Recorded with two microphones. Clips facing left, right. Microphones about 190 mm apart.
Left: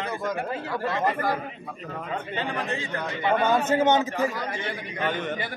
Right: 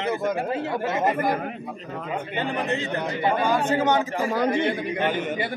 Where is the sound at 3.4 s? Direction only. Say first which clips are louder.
Left 2 dB; 25° left (ahead or behind).